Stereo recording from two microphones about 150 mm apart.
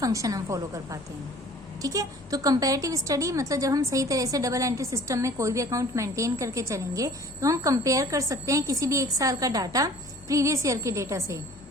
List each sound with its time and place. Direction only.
0.0 s a woman's voice: 20° right (ahead or behind)